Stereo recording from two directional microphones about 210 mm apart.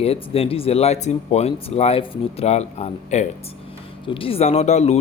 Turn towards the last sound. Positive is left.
turn(degrees=30)  # may be behind; listen again after turning